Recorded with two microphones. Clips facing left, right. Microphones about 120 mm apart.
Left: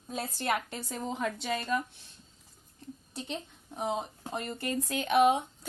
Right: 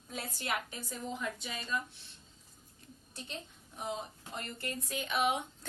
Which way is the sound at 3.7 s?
90° left.